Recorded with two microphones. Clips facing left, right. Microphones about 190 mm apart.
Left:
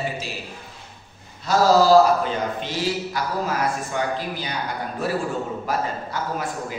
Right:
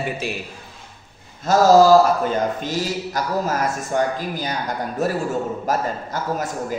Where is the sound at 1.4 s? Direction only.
45° right (ahead or behind).